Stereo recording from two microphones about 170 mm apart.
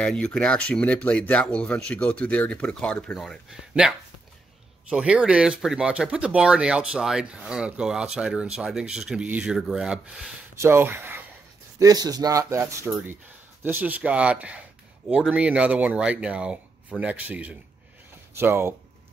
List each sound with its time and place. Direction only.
0.0 s speech: 5° left (ahead or behind); by 18.8 s 15° right (ahead or behind)